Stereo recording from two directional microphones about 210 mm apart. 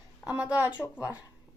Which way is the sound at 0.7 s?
10° left (ahead or behind).